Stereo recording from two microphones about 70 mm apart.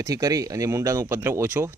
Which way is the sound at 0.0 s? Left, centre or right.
Right.